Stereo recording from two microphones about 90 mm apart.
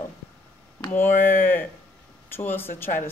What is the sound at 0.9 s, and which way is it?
Speech, 25° left (ahead or behind).